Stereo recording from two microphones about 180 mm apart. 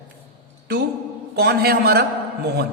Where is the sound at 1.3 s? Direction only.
65° right (ahead or behind).